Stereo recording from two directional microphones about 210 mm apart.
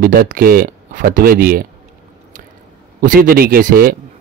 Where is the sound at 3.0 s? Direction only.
45° right (ahead or behind).